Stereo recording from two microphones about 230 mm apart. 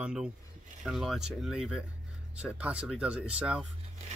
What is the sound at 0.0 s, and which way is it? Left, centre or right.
Speech, centre.